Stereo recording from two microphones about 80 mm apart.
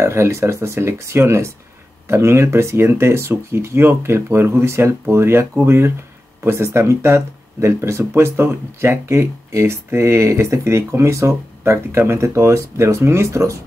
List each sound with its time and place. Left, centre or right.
0.0 s speech: right